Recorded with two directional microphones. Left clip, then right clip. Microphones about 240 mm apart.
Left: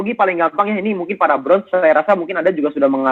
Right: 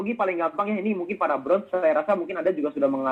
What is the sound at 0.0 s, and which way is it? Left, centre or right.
Speech, left.